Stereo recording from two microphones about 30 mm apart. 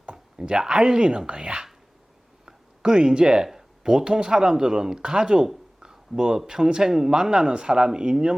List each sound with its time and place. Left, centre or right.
0.3 s speech: right
2.8 s speech: right
5.5 s a sound: centre
6.3 s speech: centre